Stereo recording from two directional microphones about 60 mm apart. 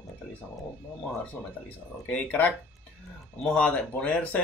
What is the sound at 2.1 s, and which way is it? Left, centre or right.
Speech, left.